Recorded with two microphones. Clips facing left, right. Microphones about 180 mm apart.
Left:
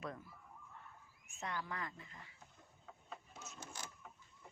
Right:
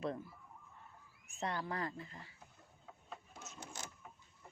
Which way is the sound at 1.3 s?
35° right (ahead or behind).